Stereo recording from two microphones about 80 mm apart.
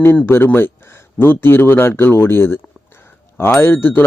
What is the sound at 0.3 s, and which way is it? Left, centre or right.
A man's voice, left.